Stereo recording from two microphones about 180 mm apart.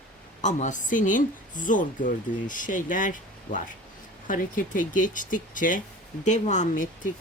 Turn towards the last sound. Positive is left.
turn(degrees=45)  # may be behind; listen again after turning